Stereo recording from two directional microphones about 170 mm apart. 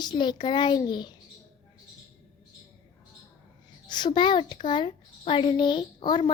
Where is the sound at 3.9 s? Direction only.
25° left (ahead or behind).